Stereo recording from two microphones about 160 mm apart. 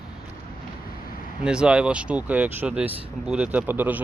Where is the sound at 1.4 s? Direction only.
5° right (ahead or behind).